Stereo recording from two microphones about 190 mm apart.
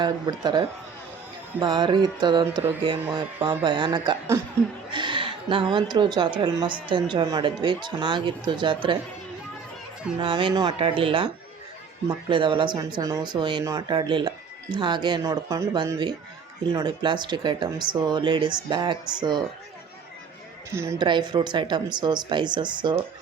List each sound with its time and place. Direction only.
0.0 s a woman's voice: 20° right (ahead or behind)
10.2 s speech: 25° right (ahead or behind)
12.3 s speech: 25° right (ahead or behind)
20.7 s speech: 15° right (ahead or behind)